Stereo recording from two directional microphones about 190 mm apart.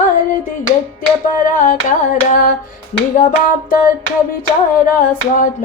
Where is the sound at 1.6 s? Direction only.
45° left (ahead or behind).